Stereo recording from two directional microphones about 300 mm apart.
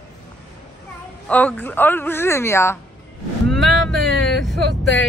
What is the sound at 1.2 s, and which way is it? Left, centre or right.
A woman's voice, centre.